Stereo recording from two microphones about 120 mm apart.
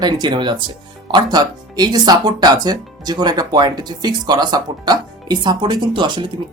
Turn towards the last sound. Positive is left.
turn(degrees=-40)  # may be behind; listen again after turning